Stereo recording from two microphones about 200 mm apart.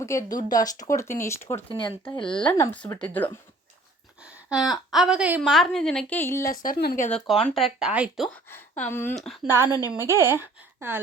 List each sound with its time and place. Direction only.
0.0 s speech: 15° left (ahead or behind)
1.5 s speech: 25° left (ahead or behind)
2.6 s speech: 10° left (ahead or behind)
4.4 s a woman's voice: centre (ahead or behind); by 6.6 s 15° left (ahead or behind)
6.6 s speech: 45° left (ahead or behind)
7.4 s a woman's voice: centre (ahead or behind)
8.4 s speech: 10° left (ahead or behind)
9.5 s speech: 10° right (ahead or behind)